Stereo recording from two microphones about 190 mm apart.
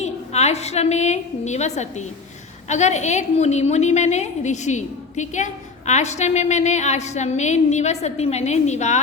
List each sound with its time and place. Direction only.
0.0 s a woman's voice: 35° left (ahead or behind)